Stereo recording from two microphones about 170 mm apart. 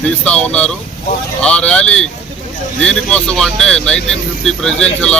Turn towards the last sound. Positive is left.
turn(degrees=5)  # may be behind; listen again after turning